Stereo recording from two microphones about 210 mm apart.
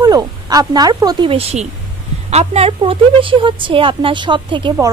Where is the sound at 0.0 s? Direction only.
20° right (ahead or behind).